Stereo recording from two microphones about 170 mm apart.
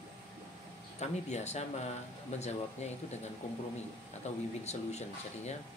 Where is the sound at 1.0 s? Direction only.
40° left (ahead or behind).